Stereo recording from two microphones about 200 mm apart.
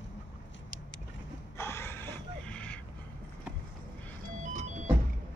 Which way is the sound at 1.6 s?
10° left (ahead or behind).